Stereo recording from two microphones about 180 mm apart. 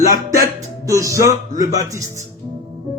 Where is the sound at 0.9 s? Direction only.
15° right (ahead or behind).